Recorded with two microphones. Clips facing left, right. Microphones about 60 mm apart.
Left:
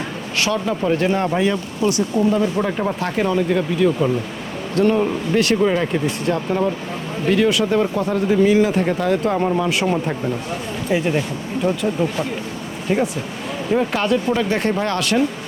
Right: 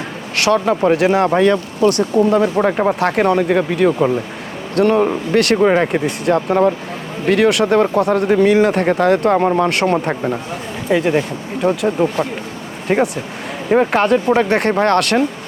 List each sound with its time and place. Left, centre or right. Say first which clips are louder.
0.3 s speech: right 6 dB; right
0.6 s speech: right 6 dB; right
0.9 s speech: right 5 dB; right
1.4 s speech: right 6 dB; right
2.6 s speech: right 6 dB; right
3.0 s speech: right 3 dB; right
5.3 s speech: right 3 dB; right
5.5 s speech: right 4 dB; right
6.2 s speech: right 8 dB; right
9.4 s speech: right 4 dB; right
9.6 s speech: right 4 dB; right
11.2 s speech: right 3 dB; right
12.9 s speech: right 4 dB; right